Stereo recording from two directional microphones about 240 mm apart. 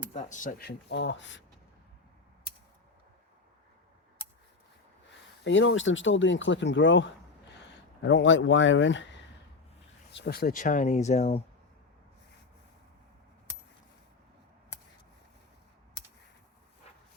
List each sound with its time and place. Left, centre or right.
0.1 s speech: left
0.9 s speech: left
5.5 s speech: left